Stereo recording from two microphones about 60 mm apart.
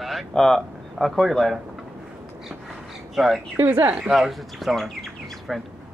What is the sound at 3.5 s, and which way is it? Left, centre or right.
Speech, right.